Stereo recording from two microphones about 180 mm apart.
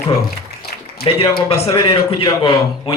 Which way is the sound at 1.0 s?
30° left (ahead or behind).